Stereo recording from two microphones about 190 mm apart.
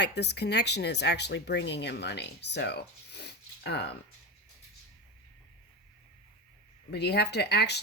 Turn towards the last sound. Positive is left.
turn(degrees=60)  # may be behind; listen again after turning